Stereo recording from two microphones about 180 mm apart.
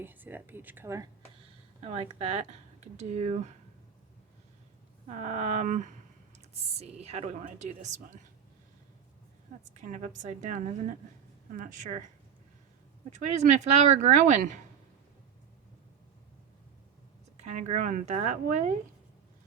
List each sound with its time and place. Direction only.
0.0 s speech: 10° right (ahead or behind)
1.8 s speech: 35° right (ahead or behind)
5.0 s speech: 40° right (ahead or behind)
9.8 s a woman's voice: 45° right (ahead or behind)
13.1 s speech: 40° right (ahead or behind)
17.4 s speech: 40° right (ahead or behind)